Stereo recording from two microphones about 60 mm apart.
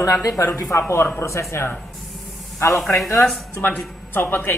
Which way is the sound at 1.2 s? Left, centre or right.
Left.